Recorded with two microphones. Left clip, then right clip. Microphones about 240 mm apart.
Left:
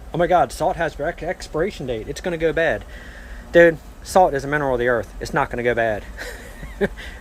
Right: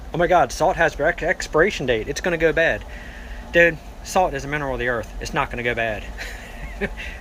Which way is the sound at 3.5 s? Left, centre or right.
Left.